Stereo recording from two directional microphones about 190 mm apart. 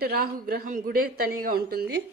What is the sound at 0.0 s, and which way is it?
A woman's voice, 50° right (ahead or behind).